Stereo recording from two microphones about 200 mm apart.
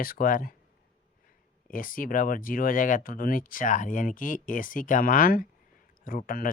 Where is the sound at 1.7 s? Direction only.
45° left (ahead or behind).